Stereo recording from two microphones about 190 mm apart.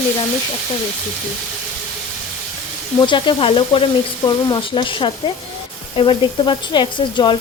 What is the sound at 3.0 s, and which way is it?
Speech, 25° left (ahead or behind).